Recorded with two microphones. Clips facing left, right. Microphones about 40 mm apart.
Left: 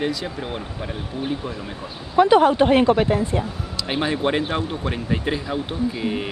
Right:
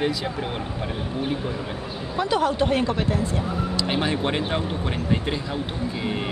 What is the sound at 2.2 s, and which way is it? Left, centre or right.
A woman's voice, left.